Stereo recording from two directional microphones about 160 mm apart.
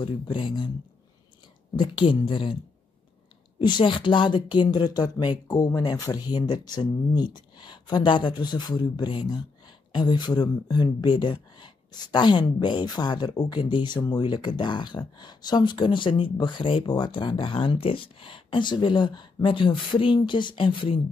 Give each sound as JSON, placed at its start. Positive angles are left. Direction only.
{"t": 0.0, "sound": "speech", "side_deg": 30}
{"t": 1.8, "sound": "speech", "side_deg": 30}
{"t": 3.5, "sound": "speech", "side_deg": 30}